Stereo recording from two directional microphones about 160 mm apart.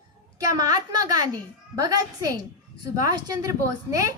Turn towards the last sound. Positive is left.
turn(degrees=-20)  # may be behind; listen again after turning